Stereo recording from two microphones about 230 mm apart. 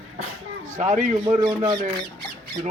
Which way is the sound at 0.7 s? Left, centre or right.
Right.